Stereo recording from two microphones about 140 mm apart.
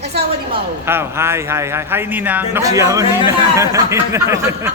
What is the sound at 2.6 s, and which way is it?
A man's voice, 25° right (ahead or behind).